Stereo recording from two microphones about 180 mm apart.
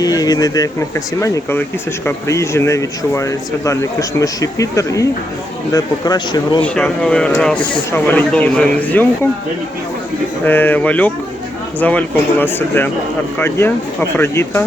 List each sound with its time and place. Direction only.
0.0 s speech: 20° left (ahead or behind)
6.6 s speech: 5° left (ahead or behind)
10.4 s speech: 10° left (ahead or behind)